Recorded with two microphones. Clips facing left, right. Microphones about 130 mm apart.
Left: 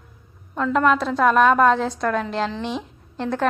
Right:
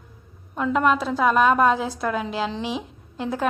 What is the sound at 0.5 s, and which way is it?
A woman's voice, 10° right (ahead or behind).